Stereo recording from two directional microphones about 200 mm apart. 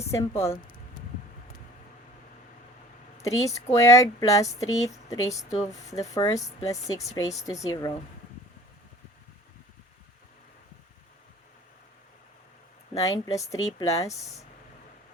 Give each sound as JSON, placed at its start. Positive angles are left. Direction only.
{"t": 0.1, "sound": "speech", "side_deg": 15}
{"t": 3.2, "sound": "speech", "side_deg": 15}
{"t": 5.5, "sound": "speech", "side_deg": 35}
{"t": 5.9, "sound": "speech", "side_deg": 15}
{"t": 12.9, "sound": "speech", "side_deg": 15}